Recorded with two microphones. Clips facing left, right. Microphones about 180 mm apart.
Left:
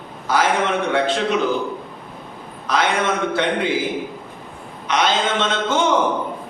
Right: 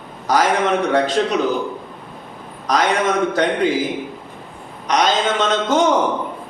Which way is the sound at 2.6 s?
40° right (ahead or behind).